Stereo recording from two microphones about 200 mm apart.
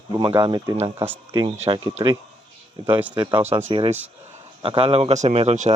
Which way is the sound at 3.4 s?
10° right (ahead or behind).